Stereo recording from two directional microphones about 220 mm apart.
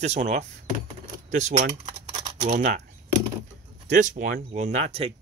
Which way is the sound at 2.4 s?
35° right (ahead or behind).